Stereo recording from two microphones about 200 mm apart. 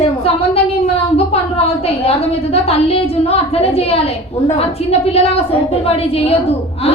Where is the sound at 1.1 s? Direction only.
30° left (ahead or behind).